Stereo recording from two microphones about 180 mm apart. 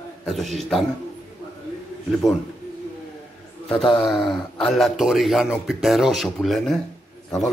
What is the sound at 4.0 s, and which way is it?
Speech, centre (ahead or behind).